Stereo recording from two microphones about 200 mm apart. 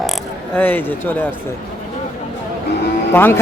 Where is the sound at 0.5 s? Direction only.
10° left (ahead or behind).